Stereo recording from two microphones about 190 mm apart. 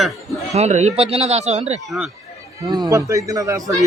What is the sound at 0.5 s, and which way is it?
A man's voice, 35° right (ahead or behind).